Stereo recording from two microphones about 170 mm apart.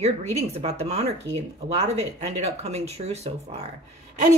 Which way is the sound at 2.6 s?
40° right (ahead or behind).